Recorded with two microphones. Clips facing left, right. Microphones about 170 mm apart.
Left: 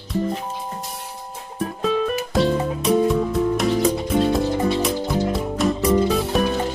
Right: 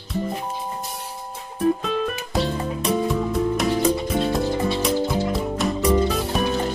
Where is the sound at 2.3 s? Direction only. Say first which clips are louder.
Left 4 dB; centre (ahead or behind).